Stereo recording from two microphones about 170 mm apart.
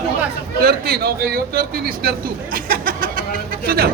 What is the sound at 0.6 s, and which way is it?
A man's voice, 65° right (ahead or behind).